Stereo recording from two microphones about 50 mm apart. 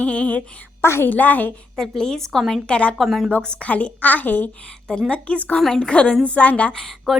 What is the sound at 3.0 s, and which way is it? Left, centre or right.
Speech, centre.